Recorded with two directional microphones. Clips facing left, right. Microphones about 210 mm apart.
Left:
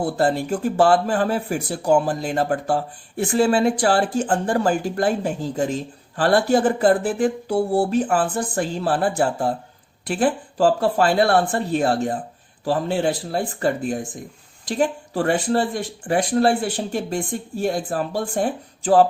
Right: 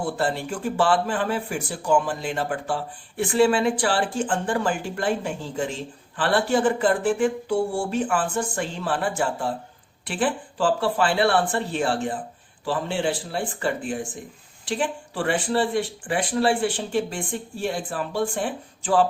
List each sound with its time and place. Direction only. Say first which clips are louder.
0.0 s speech: left 5 dB; 40° left (ahead or behind)